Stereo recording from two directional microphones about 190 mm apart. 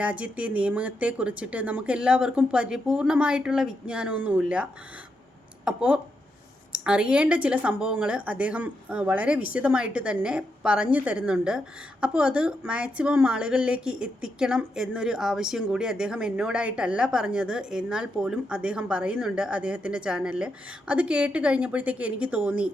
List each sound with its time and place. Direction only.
0.0 s speech: 5° right (ahead or behind)